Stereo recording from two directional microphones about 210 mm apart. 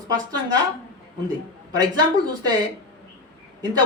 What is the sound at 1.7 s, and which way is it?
Speech, 20° right (ahead or behind).